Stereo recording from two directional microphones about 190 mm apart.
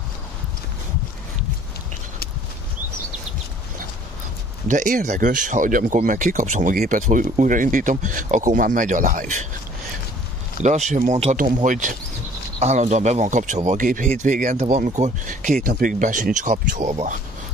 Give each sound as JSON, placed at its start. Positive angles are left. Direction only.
{"t": 4.6, "sound": "speech", "side_deg": -45}
{"t": 10.9, "sound": "speech", "side_deg": -40}